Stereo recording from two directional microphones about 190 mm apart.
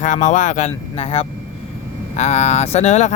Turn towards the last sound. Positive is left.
turn(degrees=35)  # may be behind; listen again after turning